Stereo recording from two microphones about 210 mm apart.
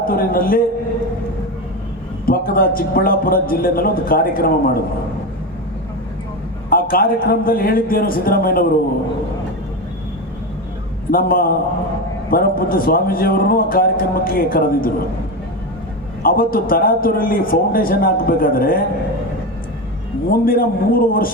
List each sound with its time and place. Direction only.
0.0 s a man's voice: 45° left (ahead or behind)
2.2 s a man's voice: 45° left (ahead or behind)
6.7 s a man's voice: 45° left (ahead or behind)
11.1 s a man's voice: 45° left (ahead or behind)
16.2 s a man's voice: 45° left (ahead or behind)
20.3 s a man's voice: 45° left (ahead or behind)